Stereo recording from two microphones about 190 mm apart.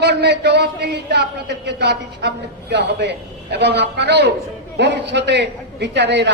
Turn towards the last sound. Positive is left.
turn(degrees=-65)  # may be behind; listen again after turning